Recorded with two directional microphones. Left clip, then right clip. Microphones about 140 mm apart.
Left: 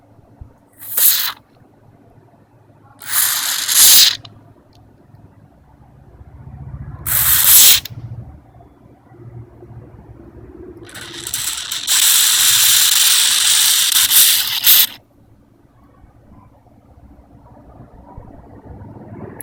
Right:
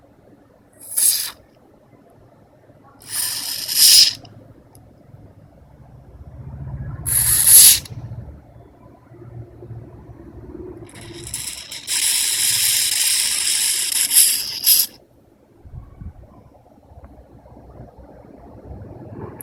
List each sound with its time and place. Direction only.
0.9 s rodents: 15° left (ahead or behind)
3.0 s ratchet: 20° left (ahead or behind)
7.0 s sanding: 10° left (ahead or behind)
10.8 s ratchet: 15° left (ahead or behind)